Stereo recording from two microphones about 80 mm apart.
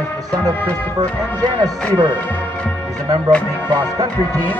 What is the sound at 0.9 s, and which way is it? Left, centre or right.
Speech, right.